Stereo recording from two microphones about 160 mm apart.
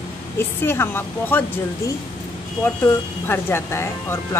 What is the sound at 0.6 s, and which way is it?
Speech, 15° left (ahead or behind).